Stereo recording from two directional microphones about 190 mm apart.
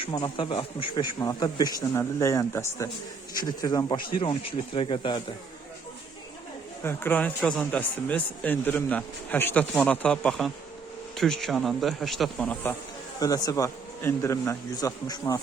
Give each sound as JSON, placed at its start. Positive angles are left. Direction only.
{"t": 0.0, "sound": "a man's voice", "side_deg": 25}
{"t": 6.8, "sound": "a man's voice", "side_deg": 10}
{"t": 13.1, "sound": "a man's voice", "side_deg": 20}